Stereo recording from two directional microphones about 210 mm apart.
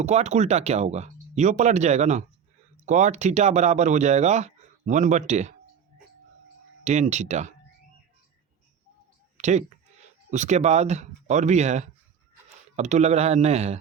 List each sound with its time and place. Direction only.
0.0 s speech: 30° right (ahead or behind)
6.8 s speech: 35° right (ahead or behind)
9.4 s speech: 35° right (ahead or behind)